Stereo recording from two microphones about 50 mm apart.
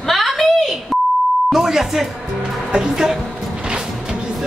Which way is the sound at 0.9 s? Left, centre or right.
Centre.